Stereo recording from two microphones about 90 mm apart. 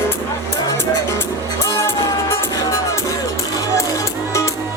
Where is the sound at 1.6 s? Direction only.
30° left (ahead or behind).